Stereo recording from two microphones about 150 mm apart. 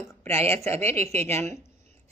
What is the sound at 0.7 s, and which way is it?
Speech, 45° right (ahead or behind).